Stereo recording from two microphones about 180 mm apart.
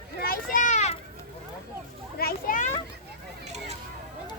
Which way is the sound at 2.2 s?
55° left (ahead or behind).